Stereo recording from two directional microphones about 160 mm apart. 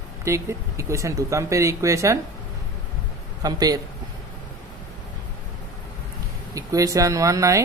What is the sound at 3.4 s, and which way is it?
Speech, 25° right (ahead or behind).